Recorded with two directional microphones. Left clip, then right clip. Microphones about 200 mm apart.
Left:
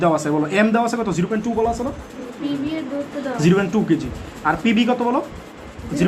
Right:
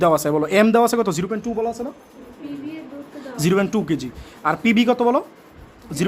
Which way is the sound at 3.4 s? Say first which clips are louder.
Left 1 dB; 50° right (ahead or behind).